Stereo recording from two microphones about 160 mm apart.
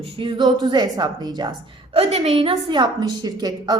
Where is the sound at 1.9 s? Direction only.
45° right (ahead or behind).